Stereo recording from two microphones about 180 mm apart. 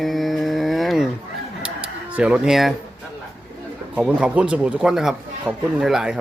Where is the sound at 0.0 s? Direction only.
Centre (ahead or behind).